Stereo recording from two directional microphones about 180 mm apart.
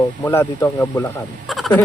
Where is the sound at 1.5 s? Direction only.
Centre (ahead or behind).